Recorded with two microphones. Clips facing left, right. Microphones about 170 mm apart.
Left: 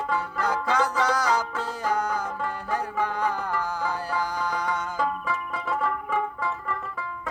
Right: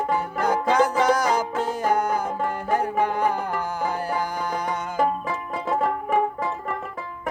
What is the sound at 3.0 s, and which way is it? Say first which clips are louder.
Music: right 2 dB; 15° right (ahead or behind).